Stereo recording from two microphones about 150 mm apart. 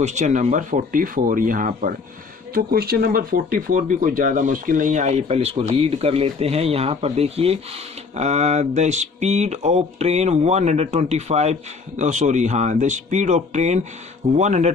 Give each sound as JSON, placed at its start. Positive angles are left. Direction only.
{"t": 0.0, "sound": "speech", "side_deg": -50}
{"t": 2.5, "sound": "speech", "side_deg": -90}